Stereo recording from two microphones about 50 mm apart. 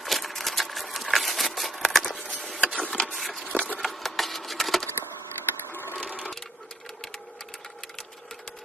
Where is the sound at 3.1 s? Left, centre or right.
Centre.